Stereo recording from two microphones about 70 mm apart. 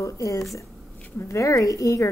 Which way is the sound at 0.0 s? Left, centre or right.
Left.